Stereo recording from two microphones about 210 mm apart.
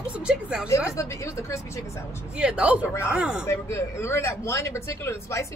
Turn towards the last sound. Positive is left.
turn(degrees=15)  # may be behind; listen again after turning